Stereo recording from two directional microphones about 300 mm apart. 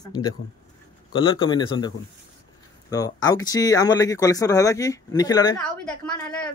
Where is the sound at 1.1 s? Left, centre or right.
Centre.